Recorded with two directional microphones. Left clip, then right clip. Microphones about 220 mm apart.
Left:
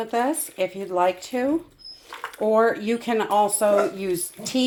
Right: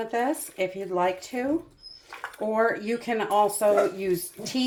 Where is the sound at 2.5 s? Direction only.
30° left (ahead or behind).